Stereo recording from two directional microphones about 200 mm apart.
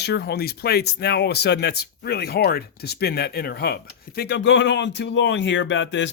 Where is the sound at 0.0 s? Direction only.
55° left (ahead or behind).